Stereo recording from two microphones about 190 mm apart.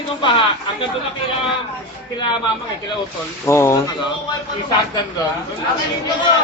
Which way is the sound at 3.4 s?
15° left (ahead or behind).